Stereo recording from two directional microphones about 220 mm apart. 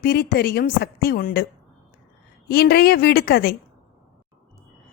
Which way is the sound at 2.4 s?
45° left (ahead or behind).